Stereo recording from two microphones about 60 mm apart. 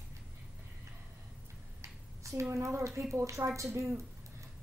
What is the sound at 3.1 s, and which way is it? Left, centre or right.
Speech, right.